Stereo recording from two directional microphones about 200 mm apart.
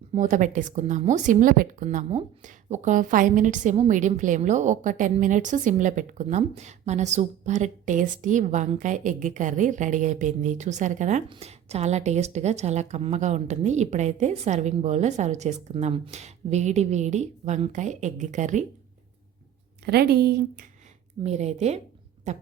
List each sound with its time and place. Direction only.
0.1 s a woman's voice: 40° right (ahead or behind)
19.8 s a woman's voice: 55° right (ahead or behind)
21.2 s a woman's voice: 35° right (ahead or behind)